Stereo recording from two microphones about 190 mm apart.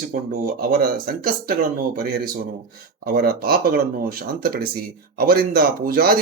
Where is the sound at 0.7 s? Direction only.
50° right (ahead or behind).